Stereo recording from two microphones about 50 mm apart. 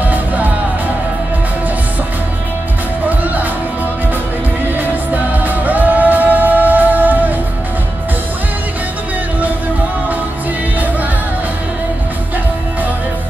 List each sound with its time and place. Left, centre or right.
0.0 s music: right
3.1 s music: right
4.7 s music: right